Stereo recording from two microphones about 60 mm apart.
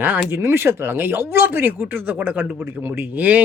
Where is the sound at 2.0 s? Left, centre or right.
Right.